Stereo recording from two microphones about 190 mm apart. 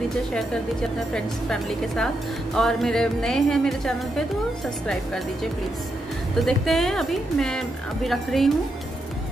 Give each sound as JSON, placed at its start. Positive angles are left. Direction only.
{"t": 1.1, "sound": "speech", "side_deg": 5}